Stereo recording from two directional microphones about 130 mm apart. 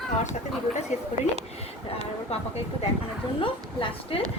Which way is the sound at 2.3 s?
50° left (ahead or behind).